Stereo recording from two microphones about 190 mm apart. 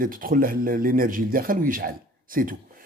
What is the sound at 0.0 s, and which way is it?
Speech, 50° right (ahead or behind).